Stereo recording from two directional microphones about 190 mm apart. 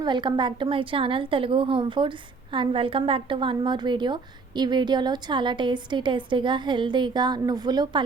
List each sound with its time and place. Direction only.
0.0 s a woman's voice: 25° right (ahead or behind)